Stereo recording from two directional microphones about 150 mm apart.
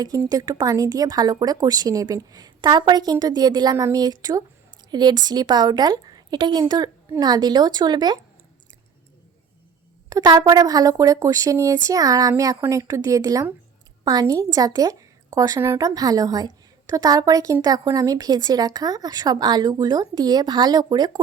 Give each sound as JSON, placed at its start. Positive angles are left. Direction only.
{"t": 0.3, "sound": "speech", "side_deg": -25}
{"t": 10.1, "sound": "a woman's voice", "side_deg": -25}